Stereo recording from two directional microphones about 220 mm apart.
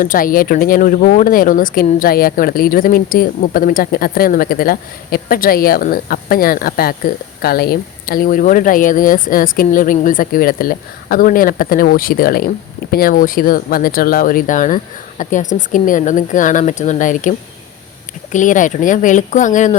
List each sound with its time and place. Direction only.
0.0 s a woman's voice: 40° left (ahead or behind)